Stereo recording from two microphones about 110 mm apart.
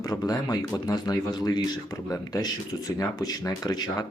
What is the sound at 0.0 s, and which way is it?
Speech, 35° left (ahead or behind).